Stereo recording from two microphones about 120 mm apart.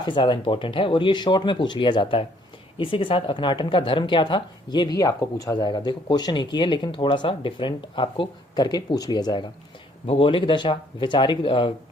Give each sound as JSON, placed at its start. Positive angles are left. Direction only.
{"t": 0.0, "sound": "speech", "side_deg": 40}